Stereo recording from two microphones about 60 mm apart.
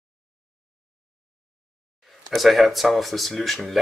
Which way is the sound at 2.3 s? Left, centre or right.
Centre.